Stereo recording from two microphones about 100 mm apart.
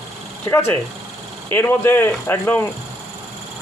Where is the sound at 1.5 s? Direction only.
20° left (ahead or behind).